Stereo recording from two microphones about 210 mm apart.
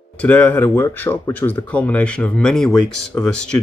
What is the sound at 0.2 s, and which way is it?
Speech, 10° left (ahead or behind).